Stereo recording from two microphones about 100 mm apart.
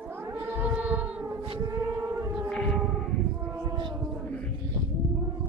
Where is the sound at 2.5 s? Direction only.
5° left (ahead or behind).